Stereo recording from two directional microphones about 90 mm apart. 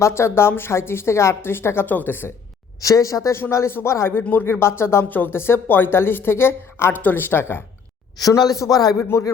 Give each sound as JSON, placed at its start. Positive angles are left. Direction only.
{"t": 0.0, "sound": "speech", "side_deg": 30}
{"t": 2.8, "sound": "speech", "side_deg": 35}
{"t": 4.2, "sound": "speech", "side_deg": 20}
{"t": 8.2, "sound": "a man's voice", "side_deg": 45}
{"t": 9.0, "sound": "speech", "side_deg": 30}